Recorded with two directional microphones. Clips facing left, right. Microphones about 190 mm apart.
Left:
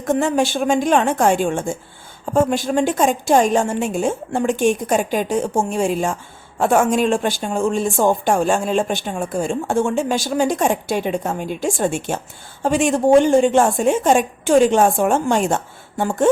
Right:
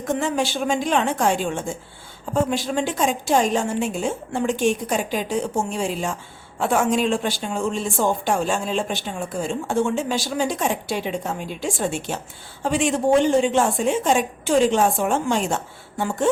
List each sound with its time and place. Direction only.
0.1 s speech: 50° left (ahead or behind)